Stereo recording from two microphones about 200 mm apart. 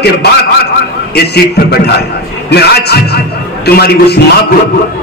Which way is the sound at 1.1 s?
55° left (ahead or behind).